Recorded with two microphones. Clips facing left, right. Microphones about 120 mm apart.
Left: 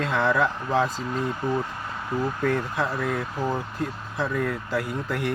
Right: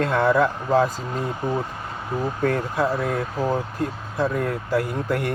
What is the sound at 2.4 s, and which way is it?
Speech, 45° right (ahead or behind).